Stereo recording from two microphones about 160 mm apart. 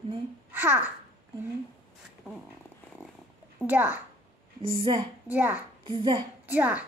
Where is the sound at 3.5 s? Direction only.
10° right (ahead or behind).